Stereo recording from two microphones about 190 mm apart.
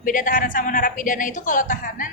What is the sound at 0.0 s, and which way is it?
A woman's voice, 45° left (ahead or behind).